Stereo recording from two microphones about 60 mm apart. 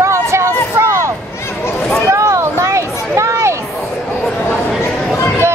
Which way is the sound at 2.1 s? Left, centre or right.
Right.